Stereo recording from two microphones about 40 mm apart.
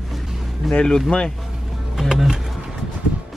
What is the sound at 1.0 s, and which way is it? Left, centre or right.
Speech, left.